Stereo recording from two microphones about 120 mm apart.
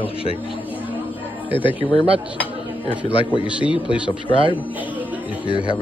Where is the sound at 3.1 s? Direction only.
45° left (ahead or behind).